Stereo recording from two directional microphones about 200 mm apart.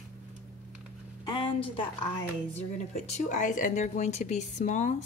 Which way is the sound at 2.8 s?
35° left (ahead or behind).